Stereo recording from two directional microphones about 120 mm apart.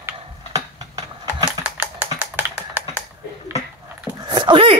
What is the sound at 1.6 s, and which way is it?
Typing, 15° right (ahead or behind).